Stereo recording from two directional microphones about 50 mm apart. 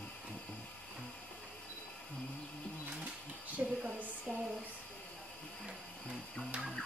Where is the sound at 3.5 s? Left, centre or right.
Right.